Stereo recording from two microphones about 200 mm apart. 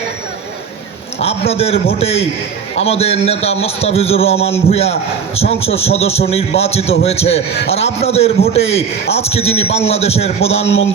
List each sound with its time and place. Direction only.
1.2 s a man's voice: 30° left (ahead or behind)